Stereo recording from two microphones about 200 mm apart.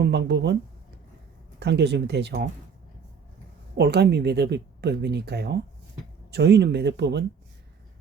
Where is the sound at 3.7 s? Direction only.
55° right (ahead or behind).